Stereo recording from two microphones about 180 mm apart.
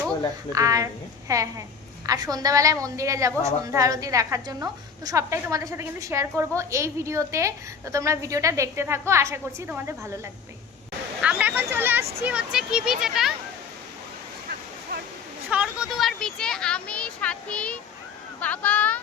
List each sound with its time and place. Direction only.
0.5 s a woman's voice: 20° right (ahead or behind)
11.2 s a woman's voice: 5° right (ahead or behind)
15.4 s a child's voice: 5° right (ahead or behind)